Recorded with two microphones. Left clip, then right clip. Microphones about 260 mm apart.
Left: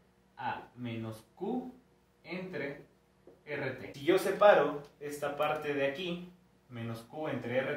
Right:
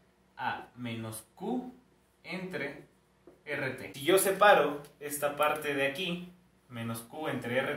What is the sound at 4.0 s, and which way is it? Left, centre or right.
Speech, left.